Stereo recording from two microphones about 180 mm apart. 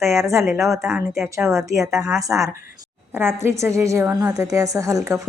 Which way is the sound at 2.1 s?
20° right (ahead or behind).